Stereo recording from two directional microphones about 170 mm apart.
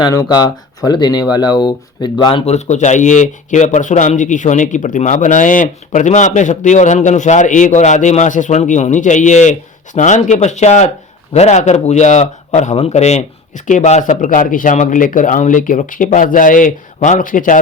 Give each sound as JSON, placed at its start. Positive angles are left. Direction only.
{"t": 0.0, "sound": "speech", "side_deg": 20}
{"t": 2.5, "sound": "a man's voice", "side_deg": 45}